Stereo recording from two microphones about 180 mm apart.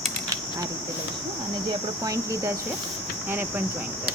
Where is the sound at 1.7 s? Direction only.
20° right (ahead or behind).